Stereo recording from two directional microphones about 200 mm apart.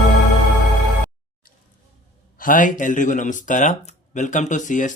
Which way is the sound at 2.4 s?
40° left (ahead or behind).